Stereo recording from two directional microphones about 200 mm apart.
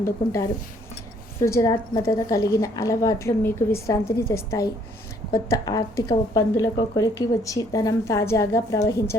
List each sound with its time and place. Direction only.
0.0 s a woman's voice: 15° left (ahead or behind)